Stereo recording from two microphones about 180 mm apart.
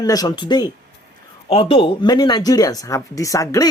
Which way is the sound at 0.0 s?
20° left (ahead or behind).